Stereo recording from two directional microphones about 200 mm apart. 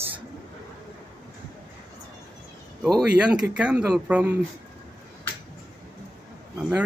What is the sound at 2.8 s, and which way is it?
Speech, centre (ahead or behind).